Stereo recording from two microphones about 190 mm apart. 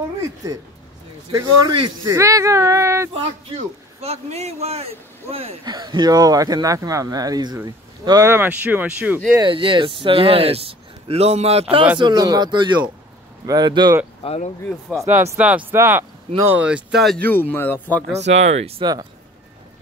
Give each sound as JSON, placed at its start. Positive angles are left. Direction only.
{"t": 0.4, "sound": "speech", "side_deg": -15}
{"t": 3.1, "sound": "speech", "side_deg": -30}
{"t": 9.4, "sound": "speech", "side_deg": -25}
{"t": 12.0, "sound": "speech", "side_deg": -20}
{"t": 14.2, "sound": "speech", "side_deg": 30}
{"t": 15.0, "sound": "speech", "side_deg": -10}
{"t": 18.2, "sound": "speech", "side_deg": -35}